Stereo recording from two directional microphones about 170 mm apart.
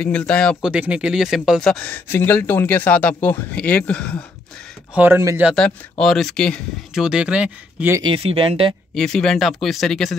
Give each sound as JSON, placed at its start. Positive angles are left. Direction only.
{"t": 0.0, "sound": "speech", "side_deg": 5}
{"t": 4.9, "sound": "speech", "side_deg": -10}
{"t": 5.5, "sound": "speech", "side_deg": 5}
{"t": 8.0, "sound": "speech", "side_deg": -30}
{"t": 8.9, "sound": "speech", "side_deg": 5}